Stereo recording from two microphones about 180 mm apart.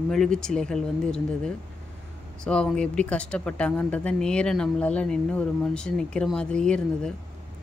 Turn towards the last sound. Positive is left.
turn(degrees=5)  # may be behind; listen again after turning